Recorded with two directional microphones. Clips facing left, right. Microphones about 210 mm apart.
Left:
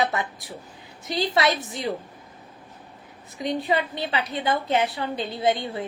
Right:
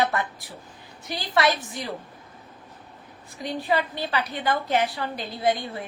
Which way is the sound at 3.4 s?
20° left (ahead or behind).